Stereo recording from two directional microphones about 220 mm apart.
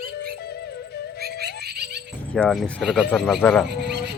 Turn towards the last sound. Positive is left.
turn(degrees=0)  # may be behind; listen again after turning